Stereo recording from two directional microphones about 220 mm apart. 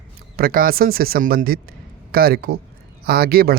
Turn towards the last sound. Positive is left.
turn(degrees=-45)  # may be behind; listen again after turning